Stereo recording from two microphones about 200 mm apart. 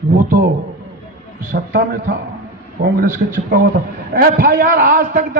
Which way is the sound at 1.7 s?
60° right (ahead or behind).